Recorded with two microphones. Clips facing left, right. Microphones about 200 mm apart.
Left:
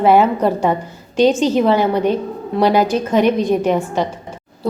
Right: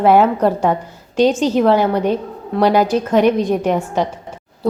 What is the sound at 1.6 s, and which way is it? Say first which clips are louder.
A woman's voice: even; 10° right (ahead or behind).